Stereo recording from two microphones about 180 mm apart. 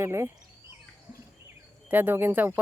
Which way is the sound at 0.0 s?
15° right (ahead or behind).